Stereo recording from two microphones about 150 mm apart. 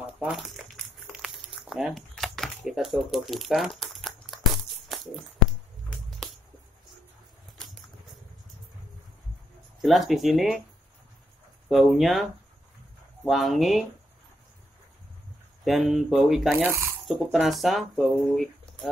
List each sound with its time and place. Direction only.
0.0 s a sound: 5° right (ahead or behind)
1.1 s crumpling: 5° right (ahead or behind)
4.9 s music: centre (ahead or behind)
6.0 s a sound: centre (ahead or behind)
7.5 s a sound: centre (ahead or behind)
9.8 s speech: centre (ahead or behind)
11.7 s speech: centre (ahead or behind)
15.6 s speech: centre (ahead or behind)
16.6 s speech: 20° right (ahead or behind)
17.1 s speech: centre (ahead or behind)